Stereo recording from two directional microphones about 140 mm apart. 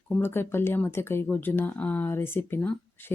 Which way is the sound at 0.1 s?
15° left (ahead or behind).